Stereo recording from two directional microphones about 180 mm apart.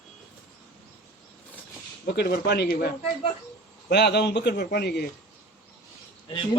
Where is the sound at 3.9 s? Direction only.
65° left (ahead or behind).